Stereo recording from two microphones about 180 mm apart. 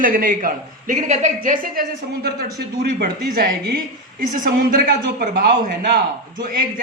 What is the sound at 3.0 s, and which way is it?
A man's voice, 55° right (ahead or behind).